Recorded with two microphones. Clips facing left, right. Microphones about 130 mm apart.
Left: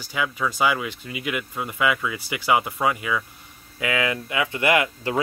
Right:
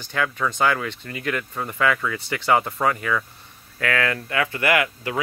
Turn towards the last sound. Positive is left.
turn(degrees=25)  # may be behind; listen again after turning